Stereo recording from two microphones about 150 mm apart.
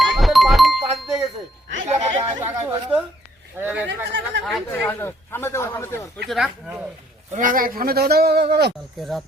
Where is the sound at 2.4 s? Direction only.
15° right (ahead or behind).